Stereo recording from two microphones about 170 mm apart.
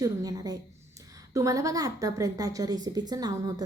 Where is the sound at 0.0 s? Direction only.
20° right (ahead or behind).